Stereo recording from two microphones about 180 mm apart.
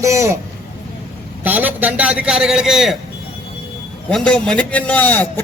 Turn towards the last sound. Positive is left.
turn(degrees=10)  # may be behind; listen again after turning